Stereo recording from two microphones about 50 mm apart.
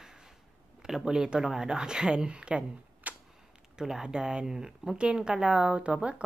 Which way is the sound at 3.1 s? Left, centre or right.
Right.